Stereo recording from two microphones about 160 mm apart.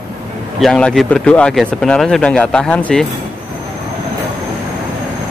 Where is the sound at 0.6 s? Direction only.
5° left (ahead or behind).